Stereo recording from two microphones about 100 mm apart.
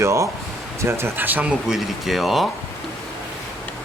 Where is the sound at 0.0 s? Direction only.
30° right (ahead or behind); by 2.5 s centre (ahead or behind).